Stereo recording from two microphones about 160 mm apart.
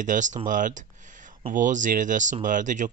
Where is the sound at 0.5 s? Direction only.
55° right (ahead or behind).